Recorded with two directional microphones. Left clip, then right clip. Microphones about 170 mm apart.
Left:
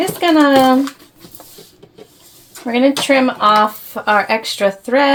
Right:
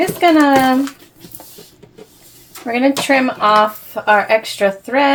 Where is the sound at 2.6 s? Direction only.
20° left (ahead or behind).